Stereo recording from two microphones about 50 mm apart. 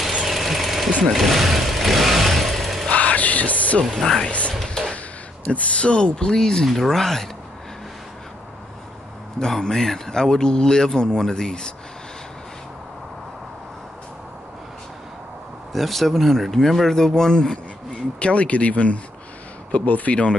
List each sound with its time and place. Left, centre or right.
0.2 s jackhammer: centre
1.1 s vehicle: centre
2.9 s a sound: left
3.8 s speech: centre
4.2 s speech: left
4.6 s a sound: centre
5.5 s speech: left; by 7.2 s centre
9.4 s speech: centre
15.7 s speech: centre
18.2 s speech: left